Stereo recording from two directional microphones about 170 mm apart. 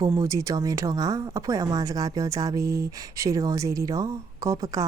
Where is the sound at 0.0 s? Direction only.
20° right (ahead or behind).